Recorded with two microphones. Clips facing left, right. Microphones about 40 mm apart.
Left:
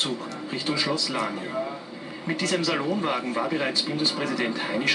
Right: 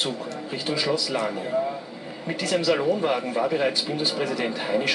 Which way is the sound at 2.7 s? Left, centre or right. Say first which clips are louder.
Right 4 dB; centre.